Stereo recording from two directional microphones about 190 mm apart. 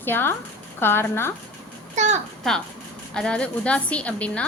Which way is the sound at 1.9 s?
40° right (ahead or behind).